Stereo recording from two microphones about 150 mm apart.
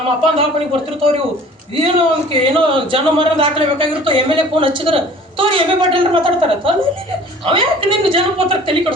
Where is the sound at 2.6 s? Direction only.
35° right (ahead or behind).